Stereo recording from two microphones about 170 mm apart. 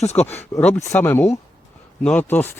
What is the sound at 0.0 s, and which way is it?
Speech, 40° left (ahead or behind).